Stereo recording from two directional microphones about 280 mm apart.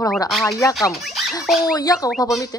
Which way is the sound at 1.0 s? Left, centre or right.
Centre.